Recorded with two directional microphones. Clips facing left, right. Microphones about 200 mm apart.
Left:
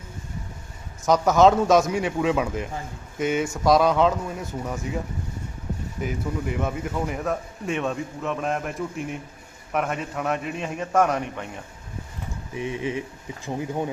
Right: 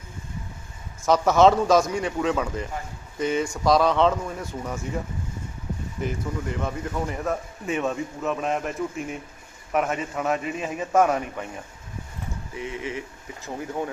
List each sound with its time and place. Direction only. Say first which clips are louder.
1.0 s a man's voice: even; centre (ahead or behind)
6.0 s a man's voice: left 1 dB; 5° left (ahead or behind)
12.5 s speech: left 4 dB; 20° left (ahead or behind)